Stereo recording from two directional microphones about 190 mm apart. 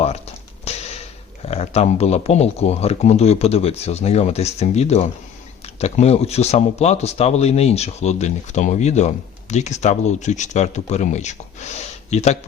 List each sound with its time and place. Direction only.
0.0 s speech: 35° left (ahead or behind)